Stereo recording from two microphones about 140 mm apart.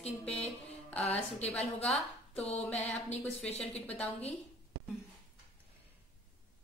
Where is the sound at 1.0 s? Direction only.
50° left (ahead or behind).